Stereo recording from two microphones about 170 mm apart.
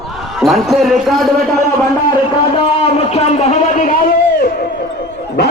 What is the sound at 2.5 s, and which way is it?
A man's voice, 35° left (ahead or behind).